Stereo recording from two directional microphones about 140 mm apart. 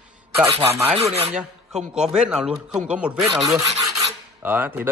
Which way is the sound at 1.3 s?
5° right (ahead or behind).